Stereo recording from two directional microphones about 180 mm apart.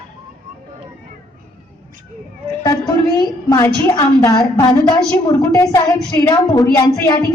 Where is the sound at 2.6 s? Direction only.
20° left (ahead or behind).